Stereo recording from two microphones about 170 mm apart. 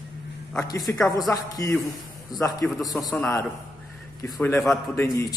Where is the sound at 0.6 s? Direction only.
20° left (ahead or behind).